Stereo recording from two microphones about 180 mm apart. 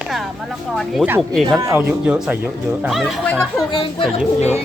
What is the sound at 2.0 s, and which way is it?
Speech, 5° right (ahead or behind).